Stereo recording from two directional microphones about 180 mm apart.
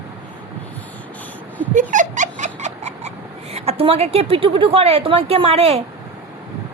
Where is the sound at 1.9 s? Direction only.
45° right (ahead or behind).